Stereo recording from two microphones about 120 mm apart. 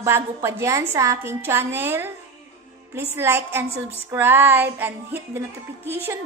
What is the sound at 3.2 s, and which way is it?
A child's voice, 20° right (ahead or behind).